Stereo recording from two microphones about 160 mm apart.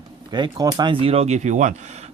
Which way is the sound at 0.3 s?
25° right (ahead or behind).